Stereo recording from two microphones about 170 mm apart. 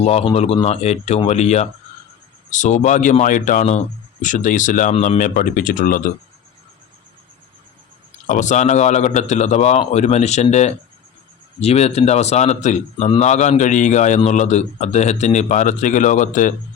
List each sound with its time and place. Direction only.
0.0 s a man's voice: 35° left (ahead or behind); by 6.0 s 50° left (ahead or behind)
8.3 s a man's voice: 45° left (ahead or behind)